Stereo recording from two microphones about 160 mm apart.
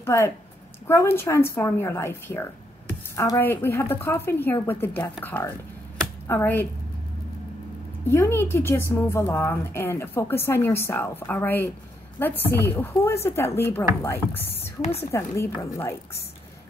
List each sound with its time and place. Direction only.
0.0 s a woman's voice: 15° left (ahead or behind)
8.1 s a woman's voice: 15° left (ahead or behind)
14.8 s a woman's voice: 40° left (ahead or behind)
15.0 s a woman's voice: 20° left (ahead or behind)